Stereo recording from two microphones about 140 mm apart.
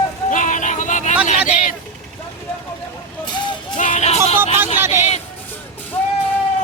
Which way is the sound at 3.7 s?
60° left (ahead or behind).